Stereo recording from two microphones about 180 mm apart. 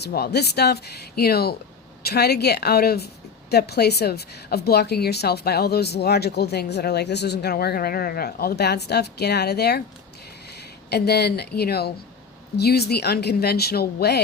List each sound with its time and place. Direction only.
0.0 s a woman's voice: 65° left (ahead or behind)
10.8 s a woman's voice: 65° left (ahead or behind)